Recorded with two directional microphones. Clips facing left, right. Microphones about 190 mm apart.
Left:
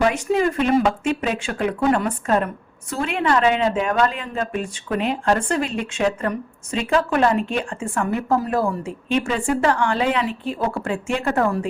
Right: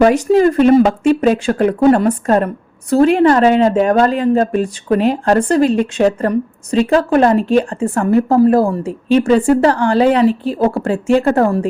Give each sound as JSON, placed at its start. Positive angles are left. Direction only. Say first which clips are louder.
{"t": 0.0, "sound": "a woman's voice", "louder": "right 9 dB", "side_deg": -40}